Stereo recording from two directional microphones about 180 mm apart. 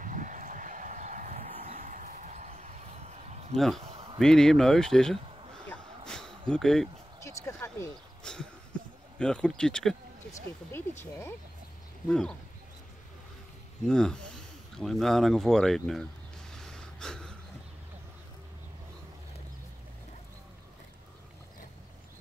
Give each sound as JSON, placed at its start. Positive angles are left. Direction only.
{"t": 0.0, "sound": "a sound", "side_deg": -45}
{"t": 3.5, "sound": "speech", "side_deg": 0}
{"t": 5.7, "sound": "a sound", "side_deg": 5}
{"t": 6.5, "sound": "speech", "side_deg": 5}
{"t": 7.2, "sound": "speech", "side_deg": 15}
{"t": 13.8, "sound": "speech", "side_deg": 5}
{"t": 16.5, "sound": "gasp", "side_deg": 5}